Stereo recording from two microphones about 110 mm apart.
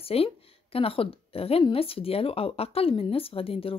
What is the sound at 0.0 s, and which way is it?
A woman's voice, 60° left (ahead or behind).